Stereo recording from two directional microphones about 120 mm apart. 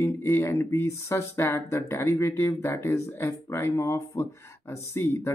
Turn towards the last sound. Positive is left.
turn(degrees=20)  # may be behind; listen again after turning